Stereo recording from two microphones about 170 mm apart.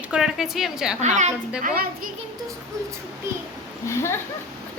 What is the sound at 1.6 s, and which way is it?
Speech, 55° right (ahead or behind).